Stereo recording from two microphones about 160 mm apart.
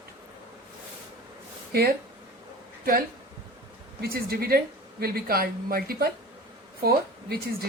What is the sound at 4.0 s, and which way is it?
Speech, 70° right (ahead or behind).